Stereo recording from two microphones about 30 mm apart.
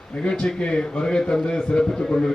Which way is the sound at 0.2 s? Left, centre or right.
Left.